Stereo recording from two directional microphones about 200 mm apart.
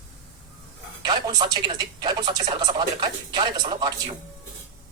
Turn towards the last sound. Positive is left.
turn(degrees=-25)  # may be behind; listen again after turning